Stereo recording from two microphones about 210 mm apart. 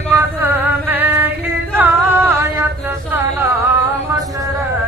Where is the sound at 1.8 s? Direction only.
10° right (ahead or behind).